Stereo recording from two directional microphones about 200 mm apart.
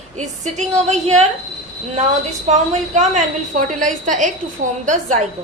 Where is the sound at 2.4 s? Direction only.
35° right (ahead or behind).